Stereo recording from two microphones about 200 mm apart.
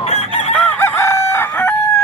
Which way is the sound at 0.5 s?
10° left (ahead or behind).